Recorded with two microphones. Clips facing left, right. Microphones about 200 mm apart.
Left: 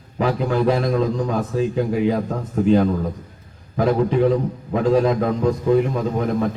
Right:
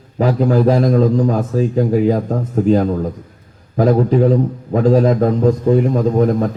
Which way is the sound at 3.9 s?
40° right (ahead or behind).